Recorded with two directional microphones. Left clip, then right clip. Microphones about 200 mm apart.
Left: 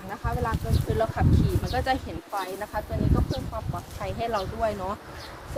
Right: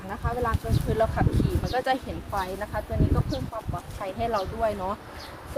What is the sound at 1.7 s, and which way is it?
Speech, 25° right (ahead or behind).